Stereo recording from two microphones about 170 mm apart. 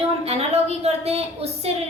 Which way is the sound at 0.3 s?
40° right (ahead or behind).